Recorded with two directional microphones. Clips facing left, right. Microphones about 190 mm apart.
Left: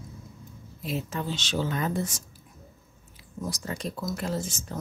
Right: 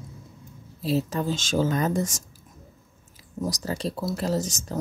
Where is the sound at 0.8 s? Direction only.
35° right (ahead or behind).